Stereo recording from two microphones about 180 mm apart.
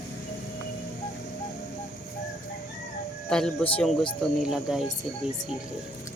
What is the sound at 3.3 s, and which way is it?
Speech, 5° left (ahead or behind).